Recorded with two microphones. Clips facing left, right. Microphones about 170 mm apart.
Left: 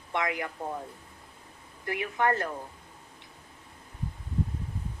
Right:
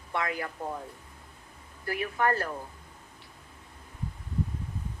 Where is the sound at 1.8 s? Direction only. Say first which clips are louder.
Even; 20° left (ahead or behind).